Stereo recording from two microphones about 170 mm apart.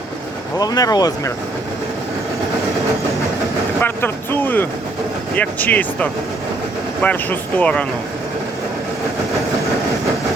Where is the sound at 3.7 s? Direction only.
10° left (ahead or behind).